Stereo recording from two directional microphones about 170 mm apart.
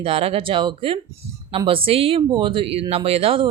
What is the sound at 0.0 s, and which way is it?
Speech, 35° right (ahead or behind).